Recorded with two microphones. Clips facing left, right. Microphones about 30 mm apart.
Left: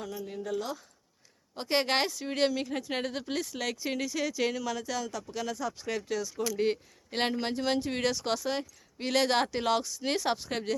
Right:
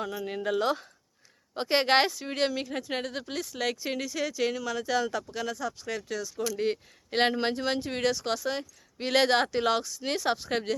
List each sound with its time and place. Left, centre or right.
0.0 s speech: right
0.3 s speech: right
1.5 s speech: centre
3.6 s speech: centre
4.9 s speech: right
5.3 s speech: centre
7.1 s speech: centre
7.5 s speech: centre
9.0 s speech: centre
10.5 s speech: centre